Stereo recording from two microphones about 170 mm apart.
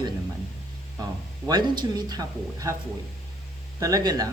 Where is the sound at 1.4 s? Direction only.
25° right (ahead or behind).